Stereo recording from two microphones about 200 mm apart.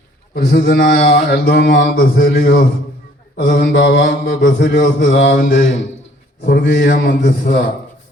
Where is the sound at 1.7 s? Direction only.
40° left (ahead or behind).